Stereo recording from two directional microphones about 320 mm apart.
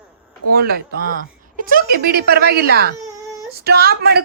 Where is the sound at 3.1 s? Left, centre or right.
Centre.